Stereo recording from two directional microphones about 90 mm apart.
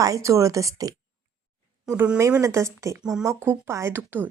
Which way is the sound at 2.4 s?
35° right (ahead or behind).